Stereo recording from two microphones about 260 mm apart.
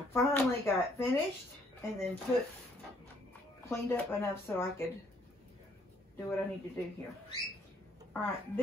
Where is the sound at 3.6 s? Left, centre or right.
Centre.